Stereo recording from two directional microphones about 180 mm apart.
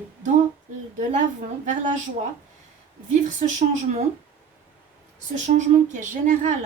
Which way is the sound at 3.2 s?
40° right (ahead or behind).